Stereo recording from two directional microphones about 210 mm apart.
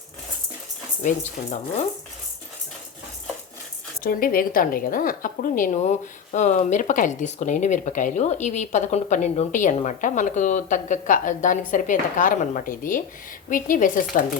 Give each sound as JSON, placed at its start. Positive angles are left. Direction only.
{"t": 1.0, "sound": "speech", "side_deg": 35}
{"t": 4.0, "sound": "speech", "side_deg": 45}